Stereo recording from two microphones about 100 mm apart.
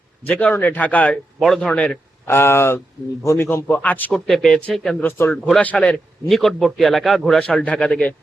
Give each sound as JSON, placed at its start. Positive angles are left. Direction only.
{"t": 0.3, "sound": "a man's voice", "side_deg": 15}
{"t": 1.4, "sound": "a man's voice", "side_deg": 5}
{"t": 2.2, "sound": "a man's voice", "side_deg": 25}
{"t": 4.1, "sound": "a man's voice", "side_deg": 5}
{"t": 5.0, "sound": "a man's voice", "side_deg": 25}
{"t": 5.3, "sound": "a man's voice", "side_deg": 10}
{"t": 7.3, "sound": "a man's voice", "side_deg": 10}